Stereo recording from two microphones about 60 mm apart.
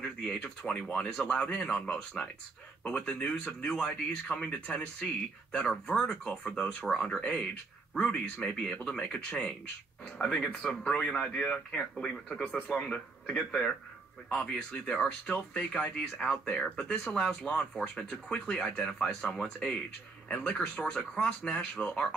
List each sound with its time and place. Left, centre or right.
0.0 s speech: centre
21.5 s speech: centre